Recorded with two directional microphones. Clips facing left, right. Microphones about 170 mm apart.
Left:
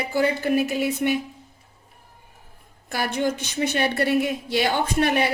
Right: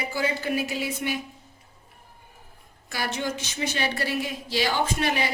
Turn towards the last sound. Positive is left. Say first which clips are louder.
# left 4 dB
turn(degrees=60)  # may be behind; listen again after turning